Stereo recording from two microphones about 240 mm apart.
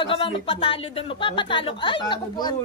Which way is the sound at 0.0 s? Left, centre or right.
Left.